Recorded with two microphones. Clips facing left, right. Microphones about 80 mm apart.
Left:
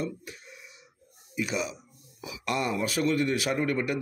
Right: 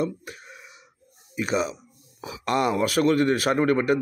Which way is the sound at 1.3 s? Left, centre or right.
Right.